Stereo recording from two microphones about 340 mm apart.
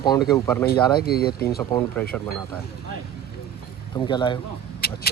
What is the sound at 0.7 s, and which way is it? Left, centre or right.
Speech, left.